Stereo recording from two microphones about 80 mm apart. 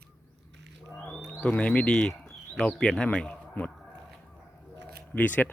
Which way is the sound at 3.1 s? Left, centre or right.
Centre.